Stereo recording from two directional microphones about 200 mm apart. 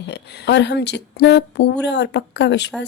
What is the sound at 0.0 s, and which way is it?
A woman's voice, 60° left (ahead or behind).